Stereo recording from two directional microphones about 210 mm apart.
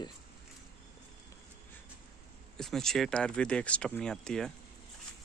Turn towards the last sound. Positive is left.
turn(degrees=5)  # may be behind; listen again after turning